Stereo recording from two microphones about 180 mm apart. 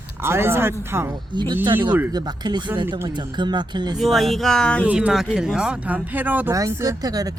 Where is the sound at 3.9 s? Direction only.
Centre (ahead or behind).